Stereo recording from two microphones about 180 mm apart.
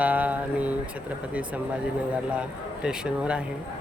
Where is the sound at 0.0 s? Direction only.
10° right (ahead or behind).